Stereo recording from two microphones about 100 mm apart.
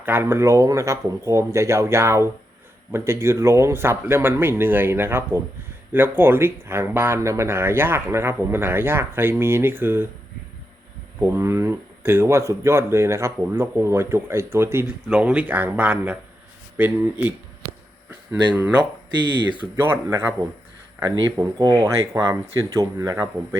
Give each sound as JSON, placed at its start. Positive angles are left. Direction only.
{"t": 0.0, "sound": "speech", "side_deg": -25}
{"t": 11.2, "sound": "speech", "side_deg": -25}
{"t": 15.1, "sound": "speech", "side_deg": -10}
{"t": 19.7, "sound": "speech", "side_deg": -25}
{"t": 21.2, "sound": "speech", "side_deg": -40}
{"t": 21.8, "sound": "speech", "side_deg": -30}